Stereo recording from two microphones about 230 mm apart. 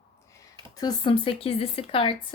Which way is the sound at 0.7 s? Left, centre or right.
Centre.